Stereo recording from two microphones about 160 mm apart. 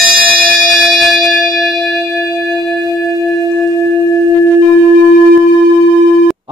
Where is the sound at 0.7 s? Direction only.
Centre (ahead or behind).